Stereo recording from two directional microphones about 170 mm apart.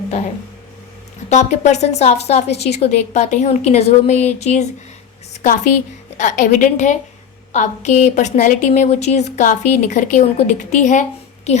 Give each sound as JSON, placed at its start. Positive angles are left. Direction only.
{"t": 1.3, "sound": "a woman's voice", "side_deg": 45}
{"t": 5.3, "sound": "a sound", "side_deg": 45}
{"t": 6.1, "sound": "a woman's voice", "side_deg": 45}